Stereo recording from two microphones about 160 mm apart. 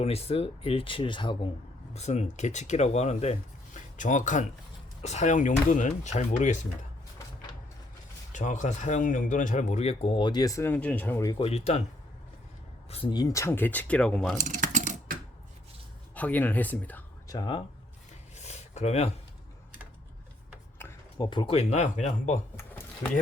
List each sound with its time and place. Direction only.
0.0 s speech: 40° left (ahead or behind)
1.9 s speech: 45° left (ahead or behind)
8.3 s speech: 50° left (ahead or behind); by 11.3 s 15° left (ahead or behind)
11.3 s speech: 40° left (ahead or behind)
12.9 s speech: 30° left (ahead or behind); by 14.3 s 5° left (ahead or behind)
14.3 s typing: 50° right (ahead or behind)
16.1 s speech: 10° left (ahead or behind)
17.2 s speech: 25° left (ahead or behind)
18.3 s a sound: 45° left (ahead or behind)
21.2 s speech: 30° left (ahead or behind); by 22.4 s 45° left (ahead or behind)
22.5 s drawer open or close: 10° left (ahead or behind)